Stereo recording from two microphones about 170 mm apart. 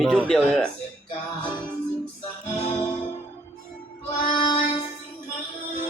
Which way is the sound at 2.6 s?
35° left (ahead or behind).